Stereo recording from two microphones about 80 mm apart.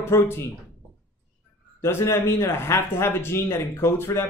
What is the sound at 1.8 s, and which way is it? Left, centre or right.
Speech, left.